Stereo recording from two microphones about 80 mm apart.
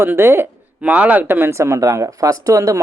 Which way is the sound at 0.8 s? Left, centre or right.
Centre.